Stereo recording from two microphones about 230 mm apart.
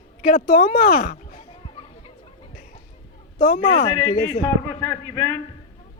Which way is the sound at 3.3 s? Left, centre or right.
Left.